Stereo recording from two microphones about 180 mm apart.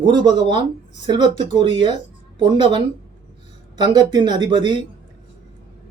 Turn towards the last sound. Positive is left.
turn(degrees=-25)  # may be behind; listen again after turning